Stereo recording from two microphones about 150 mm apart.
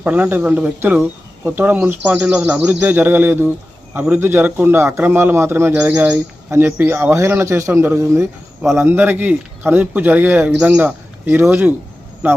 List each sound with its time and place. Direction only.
0.0 s a man's voice: 10° right (ahead or behind)